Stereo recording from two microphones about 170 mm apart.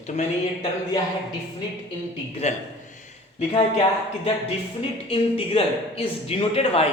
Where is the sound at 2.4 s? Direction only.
40° left (ahead or behind).